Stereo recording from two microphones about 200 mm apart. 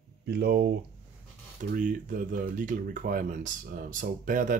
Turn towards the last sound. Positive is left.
turn(degrees=-40)  # may be behind; listen again after turning